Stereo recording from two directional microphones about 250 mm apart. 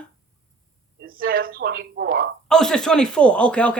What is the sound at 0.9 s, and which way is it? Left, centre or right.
A woman's voice, right.